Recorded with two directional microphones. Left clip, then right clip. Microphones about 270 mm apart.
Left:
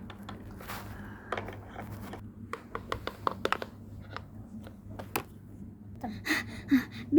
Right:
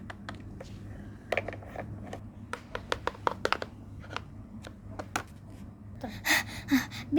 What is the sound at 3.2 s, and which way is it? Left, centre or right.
Computer keyboard, centre.